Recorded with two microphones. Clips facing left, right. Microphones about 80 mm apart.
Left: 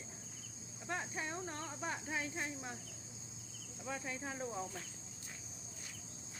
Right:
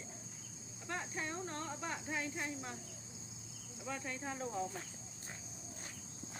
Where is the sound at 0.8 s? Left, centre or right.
Centre.